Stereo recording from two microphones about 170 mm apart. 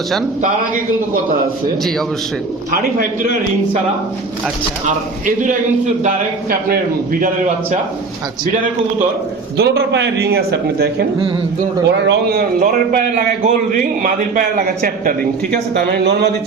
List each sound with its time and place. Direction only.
5.2 s a man's voice: 50° right (ahead or behind)
9.6 s speech: 75° right (ahead or behind)
11.9 s a man's voice: 90° right; by 15.3 s 60° right (ahead or behind)
15.7 s speech: 75° right (ahead or behind)